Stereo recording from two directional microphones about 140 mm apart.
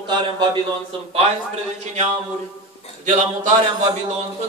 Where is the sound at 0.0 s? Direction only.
35° right (ahead or behind).